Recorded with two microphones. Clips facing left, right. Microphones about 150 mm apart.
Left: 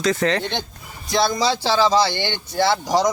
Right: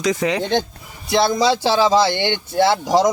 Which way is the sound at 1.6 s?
15° right (ahead or behind).